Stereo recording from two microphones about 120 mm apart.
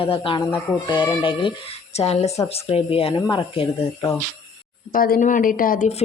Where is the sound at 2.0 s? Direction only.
60° left (ahead or behind).